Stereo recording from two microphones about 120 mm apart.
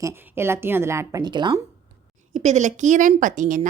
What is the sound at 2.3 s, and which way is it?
A woman's voice, 85° right.